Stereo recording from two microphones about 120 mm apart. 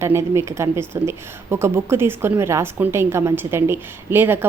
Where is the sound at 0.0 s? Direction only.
25° right (ahead or behind).